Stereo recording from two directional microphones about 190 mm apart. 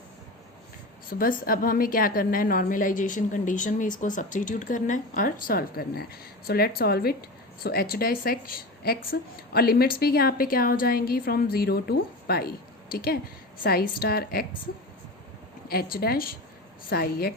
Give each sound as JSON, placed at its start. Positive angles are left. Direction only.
{"t": 1.2, "sound": "a woman's voice", "side_deg": 50}
{"t": 15.7, "sound": "a woman's voice", "side_deg": 50}